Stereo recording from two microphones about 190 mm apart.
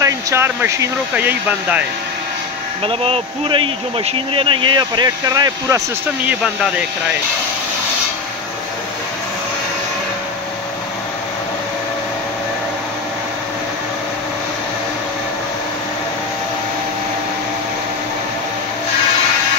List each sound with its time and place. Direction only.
0.0 s speech: 15° right (ahead or behind)
2.8 s speech: 30° right (ahead or behind)
6.2 s speech: 5° right (ahead or behind)